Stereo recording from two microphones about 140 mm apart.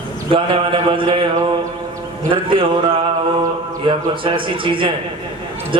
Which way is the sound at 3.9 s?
35° right (ahead or behind).